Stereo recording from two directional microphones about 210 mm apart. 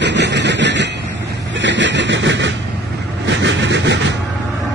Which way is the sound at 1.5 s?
60° right (ahead or behind).